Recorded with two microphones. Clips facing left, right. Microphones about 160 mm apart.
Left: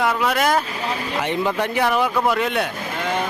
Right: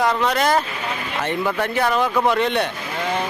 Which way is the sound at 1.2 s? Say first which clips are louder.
Even; 15° left (ahead or behind).